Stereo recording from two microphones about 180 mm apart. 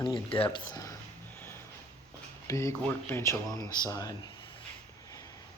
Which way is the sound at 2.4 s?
15° left (ahead or behind).